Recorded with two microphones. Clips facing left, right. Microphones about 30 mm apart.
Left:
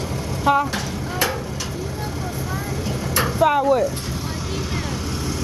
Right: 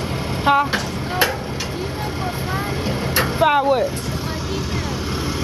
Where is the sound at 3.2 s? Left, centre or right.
Right.